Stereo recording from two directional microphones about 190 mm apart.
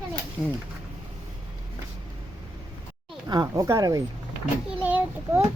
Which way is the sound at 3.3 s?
20° right (ahead or behind).